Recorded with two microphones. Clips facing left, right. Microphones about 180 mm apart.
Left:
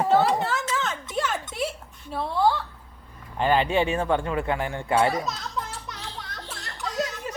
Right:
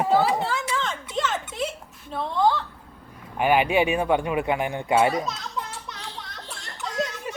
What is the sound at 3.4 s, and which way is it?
Speech, 15° right (ahead or behind).